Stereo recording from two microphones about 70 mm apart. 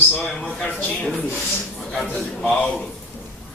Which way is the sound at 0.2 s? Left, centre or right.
Centre.